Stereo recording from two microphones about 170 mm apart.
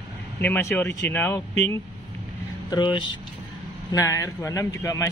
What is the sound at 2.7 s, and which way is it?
A man's voice, 25° left (ahead or behind).